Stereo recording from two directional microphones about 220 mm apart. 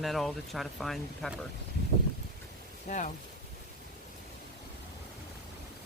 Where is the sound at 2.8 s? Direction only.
35° left (ahead or behind).